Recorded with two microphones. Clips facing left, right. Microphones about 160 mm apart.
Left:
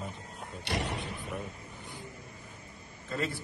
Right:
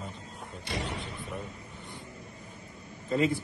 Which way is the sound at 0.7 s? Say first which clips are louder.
Left 1 dB; 70° left (ahead or behind).